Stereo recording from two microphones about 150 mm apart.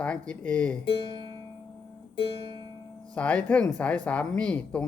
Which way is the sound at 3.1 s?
10° left (ahead or behind).